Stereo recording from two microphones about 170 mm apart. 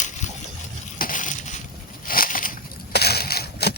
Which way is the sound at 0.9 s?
55° left (ahead or behind).